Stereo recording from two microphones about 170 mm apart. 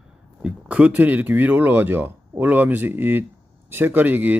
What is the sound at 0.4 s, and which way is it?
Speech, 5° right (ahead or behind).